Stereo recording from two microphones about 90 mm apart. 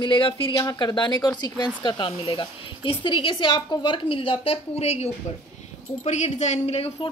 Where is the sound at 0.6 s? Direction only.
50° left (ahead or behind); by 4.6 s 90° left.